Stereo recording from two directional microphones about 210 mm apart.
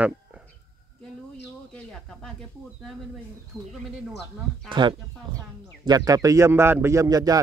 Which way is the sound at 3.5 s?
15° right (ahead or behind).